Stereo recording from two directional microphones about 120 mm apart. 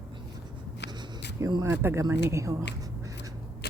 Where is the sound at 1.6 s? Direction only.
20° right (ahead or behind).